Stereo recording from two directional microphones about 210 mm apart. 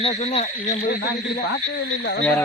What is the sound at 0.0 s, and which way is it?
Speech, 30° left (ahead or behind).